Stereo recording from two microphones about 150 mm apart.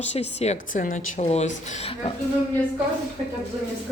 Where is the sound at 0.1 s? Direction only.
45° left (ahead or behind).